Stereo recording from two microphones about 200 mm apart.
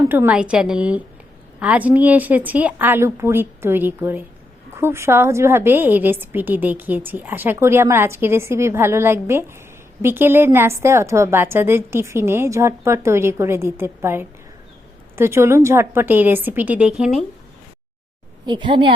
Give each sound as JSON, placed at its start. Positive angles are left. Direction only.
{"t": 0.1, "sound": "a woman's voice", "side_deg": -10}
{"t": 18.4, "sound": "a woman's voice", "side_deg": -25}